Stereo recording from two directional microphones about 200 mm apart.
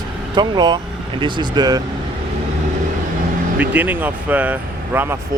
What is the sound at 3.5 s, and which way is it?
Speech, 10° right (ahead or behind).